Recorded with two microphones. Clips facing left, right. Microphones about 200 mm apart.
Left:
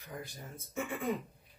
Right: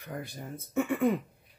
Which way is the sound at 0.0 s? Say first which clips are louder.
Right 5 dB; 60° right (ahead or behind).